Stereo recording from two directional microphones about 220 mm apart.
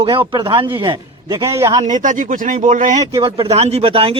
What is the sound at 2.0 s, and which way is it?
Speech, 35° right (ahead or behind).